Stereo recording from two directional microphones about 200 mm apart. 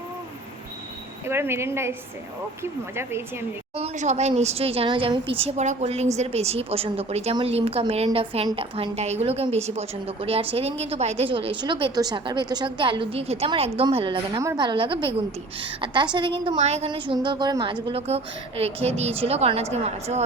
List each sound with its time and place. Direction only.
1.3 s speech: 10° right (ahead or behind)
3.8 s a woman's voice: 35° right (ahead or behind)
16.1 s a woman's voice: 25° right (ahead or behind)